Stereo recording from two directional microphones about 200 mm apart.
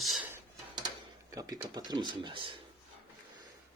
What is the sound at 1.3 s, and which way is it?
Speech, 15° right (ahead or behind).